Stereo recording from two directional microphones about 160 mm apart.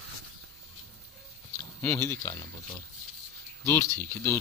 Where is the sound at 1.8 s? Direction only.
15° left (ahead or behind).